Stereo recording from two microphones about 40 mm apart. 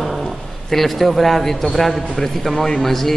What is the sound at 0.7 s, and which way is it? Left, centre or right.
A man's voice, centre.